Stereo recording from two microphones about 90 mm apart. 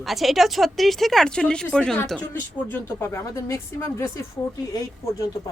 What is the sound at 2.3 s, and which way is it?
Speech, 20° left (ahead or behind).